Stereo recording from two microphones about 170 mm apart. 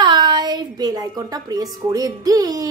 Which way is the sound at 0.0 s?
25° right (ahead or behind).